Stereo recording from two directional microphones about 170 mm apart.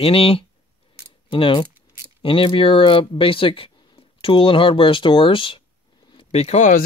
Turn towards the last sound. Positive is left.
turn(degrees=50)  # may be behind; listen again after turning